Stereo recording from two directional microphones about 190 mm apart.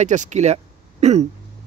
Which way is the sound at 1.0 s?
35° right (ahead or behind).